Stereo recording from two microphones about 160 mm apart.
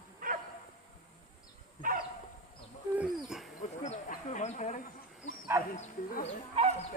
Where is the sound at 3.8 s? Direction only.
45° left (ahead or behind).